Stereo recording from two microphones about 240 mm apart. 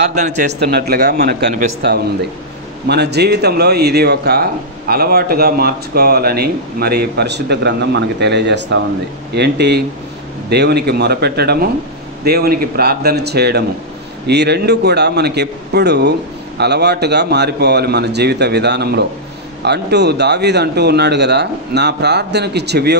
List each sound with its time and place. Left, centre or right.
0.1 s a man's voice: right
0.6 s speech: right
2.9 s a man's voice: right